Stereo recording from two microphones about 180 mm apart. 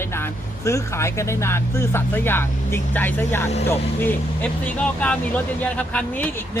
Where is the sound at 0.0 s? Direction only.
15° left (ahead or behind).